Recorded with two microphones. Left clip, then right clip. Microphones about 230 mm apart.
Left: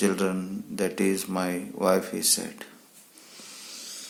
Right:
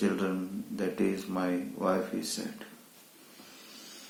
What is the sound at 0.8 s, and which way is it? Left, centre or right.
Speech, left.